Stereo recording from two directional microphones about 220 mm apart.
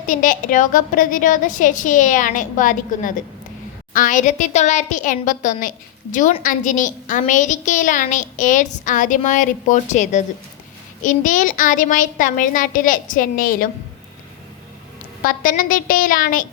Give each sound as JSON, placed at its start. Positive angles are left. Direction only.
{"t": 0.1, "sound": "a woman's voice", "side_deg": 35}
{"t": 15.2, "sound": "a woman's voice", "side_deg": 40}